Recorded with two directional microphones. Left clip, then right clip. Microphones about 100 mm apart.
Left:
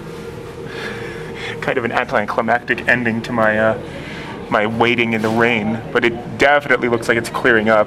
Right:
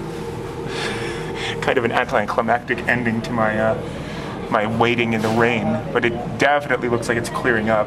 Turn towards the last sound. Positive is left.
turn(degrees=35)  # may be behind; listen again after turning